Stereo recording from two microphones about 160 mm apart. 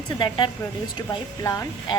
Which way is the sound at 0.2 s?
30° left (ahead or behind).